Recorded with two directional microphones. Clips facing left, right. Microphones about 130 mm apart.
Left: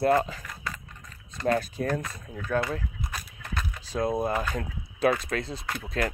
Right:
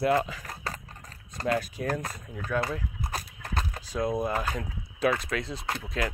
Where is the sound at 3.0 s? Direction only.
35° right (ahead or behind).